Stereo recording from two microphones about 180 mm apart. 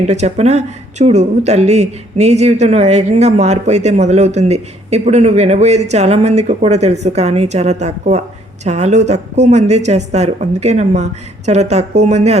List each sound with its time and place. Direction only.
0.1 s speech: 40° right (ahead or behind)